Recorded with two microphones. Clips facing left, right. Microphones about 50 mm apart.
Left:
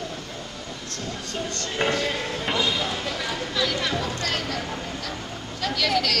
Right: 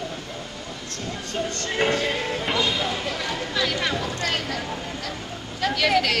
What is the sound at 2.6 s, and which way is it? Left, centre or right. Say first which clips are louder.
A man's voice: right 1 dB; centre.